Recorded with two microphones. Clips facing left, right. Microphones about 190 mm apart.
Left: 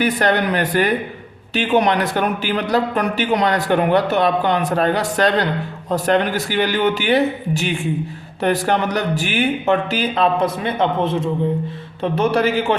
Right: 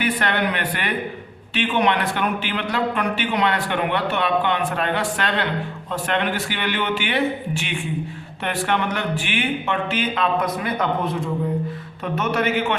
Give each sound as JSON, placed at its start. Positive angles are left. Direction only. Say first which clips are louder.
{"t": 0.0, "sound": "speech", "louder": "left 5 dB", "side_deg": 40}